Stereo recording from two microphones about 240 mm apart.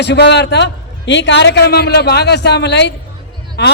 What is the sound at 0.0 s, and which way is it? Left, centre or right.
A man's voice, left.